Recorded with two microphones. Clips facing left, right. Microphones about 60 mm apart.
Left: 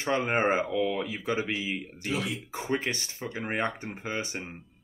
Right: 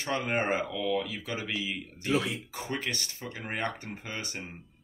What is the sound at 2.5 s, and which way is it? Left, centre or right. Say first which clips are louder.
Speech: left 4 dB; left.